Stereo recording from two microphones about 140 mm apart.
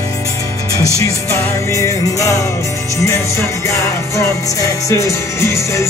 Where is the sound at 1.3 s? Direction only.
20° left (ahead or behind).